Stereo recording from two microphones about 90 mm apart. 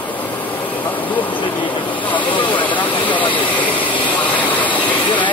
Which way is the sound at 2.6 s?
20° left (ahead or behind).